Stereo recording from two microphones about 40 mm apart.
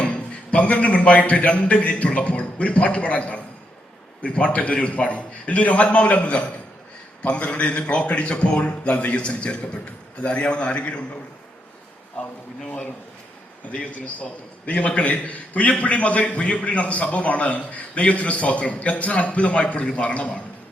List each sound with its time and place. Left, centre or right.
0.0 s a man's voice: left
12.2 s a man's voice: left